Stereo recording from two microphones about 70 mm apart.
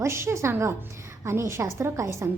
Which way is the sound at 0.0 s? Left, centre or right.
Right.